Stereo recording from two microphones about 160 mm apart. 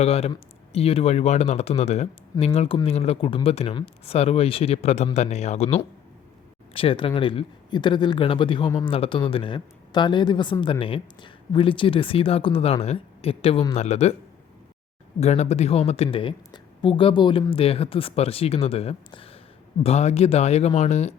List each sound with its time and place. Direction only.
0.0 s speech: 40° left (ahead or behind)
6.7 s speech: 35° left (ahead or behind)
15.2 s speech: 45° left (ahead or behind)